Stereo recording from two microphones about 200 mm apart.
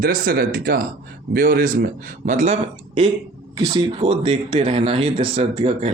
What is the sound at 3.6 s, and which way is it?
Speech, 20° right (ahead or behind).